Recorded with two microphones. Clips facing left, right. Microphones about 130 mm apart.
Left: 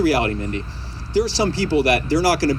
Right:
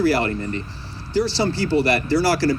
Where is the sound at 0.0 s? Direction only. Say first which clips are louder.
Left 1 dB; 90° left.